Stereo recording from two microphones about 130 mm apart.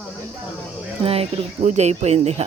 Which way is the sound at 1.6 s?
65° right (ahead or behind).